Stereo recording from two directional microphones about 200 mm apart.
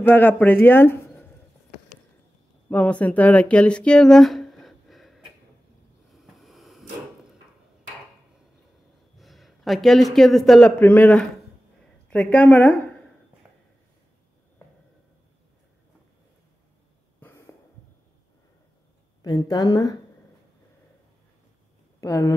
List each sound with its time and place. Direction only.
0.0 s speech: 10° left (ahead or behind)
2.7 s speech: 5° left (ahead or behind)
6.3 s a sound: centre (ahead or behind)
9.2 s speech: centre (ahead or behind)
13.4 s a sound: 10° right (ahead or behind)
17.2 s cough: 15° left (ahead or behind)
19.2 s a woman's voice: 20° left (ahead or behind)
22.0 s speech: 15° left (ahead or behind)